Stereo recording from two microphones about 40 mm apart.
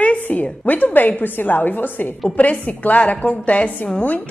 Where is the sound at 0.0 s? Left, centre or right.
Left.